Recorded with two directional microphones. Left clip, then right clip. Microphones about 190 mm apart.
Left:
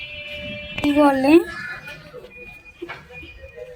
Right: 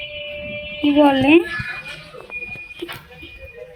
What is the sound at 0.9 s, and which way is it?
Speech, 5° left (ahead or behind).